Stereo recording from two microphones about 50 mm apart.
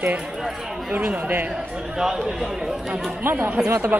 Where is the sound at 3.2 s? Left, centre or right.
Right.